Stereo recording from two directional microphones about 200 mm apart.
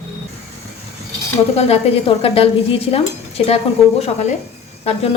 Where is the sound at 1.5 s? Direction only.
30° left (ahead or behind).